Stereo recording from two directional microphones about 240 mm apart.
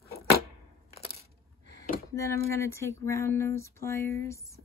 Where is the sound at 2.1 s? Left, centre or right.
Centre.